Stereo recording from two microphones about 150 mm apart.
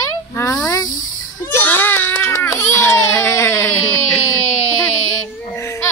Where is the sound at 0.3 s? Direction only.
20° left (ahead or behind).